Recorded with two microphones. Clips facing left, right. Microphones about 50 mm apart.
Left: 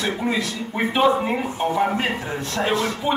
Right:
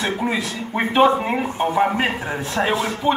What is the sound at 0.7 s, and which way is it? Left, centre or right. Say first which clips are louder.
A man's voice: right 3 dB; centre.